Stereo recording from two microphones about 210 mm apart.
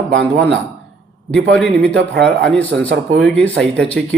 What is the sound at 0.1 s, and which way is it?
Speech, 60° right (ahead or behind).